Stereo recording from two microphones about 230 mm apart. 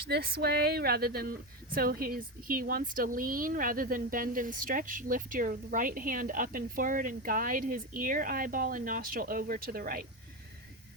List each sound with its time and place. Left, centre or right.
0.1 s speech: right